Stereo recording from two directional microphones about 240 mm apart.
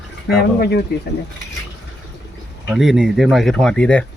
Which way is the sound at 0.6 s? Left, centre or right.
Left.